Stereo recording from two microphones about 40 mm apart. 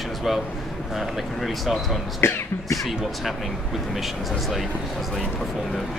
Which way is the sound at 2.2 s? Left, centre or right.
Left.